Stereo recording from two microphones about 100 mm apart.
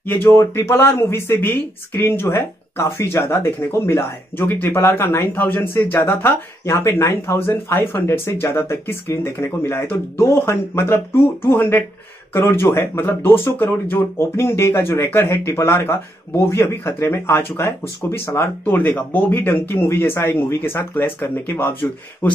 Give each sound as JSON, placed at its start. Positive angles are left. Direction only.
{"t": 0.1, "sound": "speech", "side_deg": 20}